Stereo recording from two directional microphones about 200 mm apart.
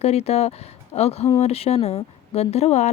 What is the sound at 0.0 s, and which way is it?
A woman's voice, 30° left (ahead or behind).